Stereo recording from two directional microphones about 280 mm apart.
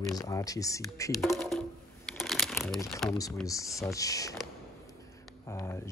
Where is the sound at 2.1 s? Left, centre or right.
Centre.